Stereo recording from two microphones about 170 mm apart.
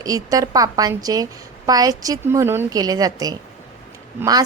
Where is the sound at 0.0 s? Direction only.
20° right (ahead or behind).